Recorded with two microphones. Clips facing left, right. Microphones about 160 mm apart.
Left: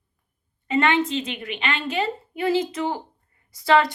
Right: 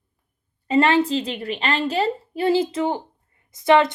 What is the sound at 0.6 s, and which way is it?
A woman's voice, 35° right (ahead or behind).